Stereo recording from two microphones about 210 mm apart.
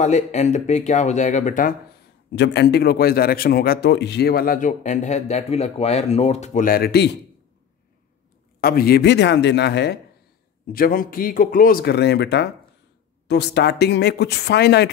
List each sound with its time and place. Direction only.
0.0 s speech: 35° left (ahead or behind)
2.3 s a man's voice: 55° left (ahead or behind)
8.5 s a man's voice: 45° left (ahead or behind)